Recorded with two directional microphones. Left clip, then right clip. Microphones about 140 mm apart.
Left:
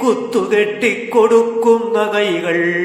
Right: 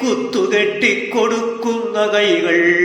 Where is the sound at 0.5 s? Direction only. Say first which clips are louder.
Even; 40° left (ahead or behind).